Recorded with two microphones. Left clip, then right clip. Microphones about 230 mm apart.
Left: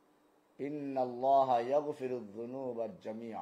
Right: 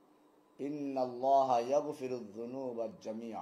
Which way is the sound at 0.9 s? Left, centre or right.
Left.